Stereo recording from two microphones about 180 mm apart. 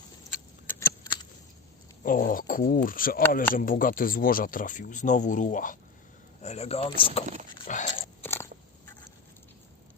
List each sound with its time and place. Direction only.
0.9 s a sound: 25° left (ahead or behind)
2.0 s speech: 50° left (ahead or behind); by 7.3 s 30° left (ahead or behind)
7.7 s biting: 45° left (ahead or behind)
8.2 s biting: 15° left (ahead or behind)